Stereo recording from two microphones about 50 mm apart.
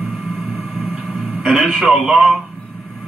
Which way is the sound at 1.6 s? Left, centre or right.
Centre.